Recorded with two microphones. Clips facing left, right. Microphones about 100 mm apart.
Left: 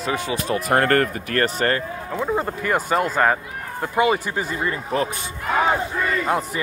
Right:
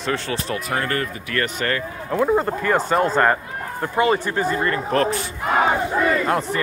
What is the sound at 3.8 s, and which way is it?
Speech, 15° left (ahead or behind).